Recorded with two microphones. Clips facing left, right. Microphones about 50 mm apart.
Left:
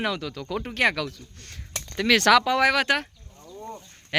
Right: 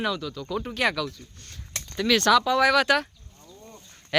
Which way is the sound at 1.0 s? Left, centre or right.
Left.